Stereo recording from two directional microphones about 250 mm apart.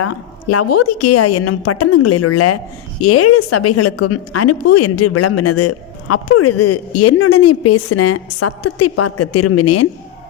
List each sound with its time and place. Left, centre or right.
0.0 s a woman's voice: left